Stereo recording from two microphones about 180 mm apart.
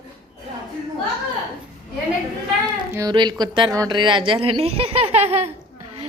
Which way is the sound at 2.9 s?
20° right (ahead or behind).